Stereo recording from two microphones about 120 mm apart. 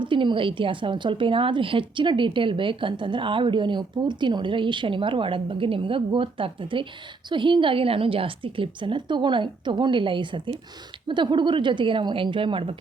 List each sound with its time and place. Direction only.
0.0 s a woman's voice: 40° right (ahead or behind)